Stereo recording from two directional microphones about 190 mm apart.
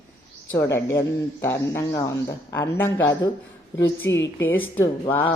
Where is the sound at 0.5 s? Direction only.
10° left (ahead or behind).